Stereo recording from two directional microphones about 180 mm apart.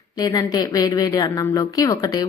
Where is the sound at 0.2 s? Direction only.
20° left (ahead or behind).